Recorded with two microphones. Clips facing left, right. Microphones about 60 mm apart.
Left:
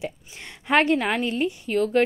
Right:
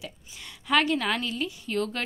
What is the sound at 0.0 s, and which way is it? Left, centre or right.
Speech, left.